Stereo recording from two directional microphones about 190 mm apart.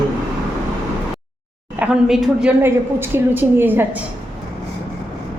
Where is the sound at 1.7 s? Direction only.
5° right (ahead or behind).